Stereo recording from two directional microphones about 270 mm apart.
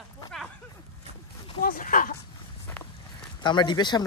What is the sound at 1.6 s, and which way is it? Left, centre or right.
Speech, left.